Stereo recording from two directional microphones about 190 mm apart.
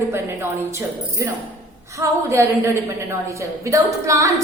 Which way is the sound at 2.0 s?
15° right (ahead or behind).